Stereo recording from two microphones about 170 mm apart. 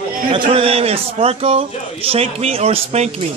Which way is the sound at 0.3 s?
35° right (ahead or behind).